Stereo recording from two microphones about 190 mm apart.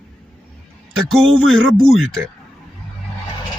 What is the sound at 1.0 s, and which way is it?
A man's voice, centre (ahead or behind).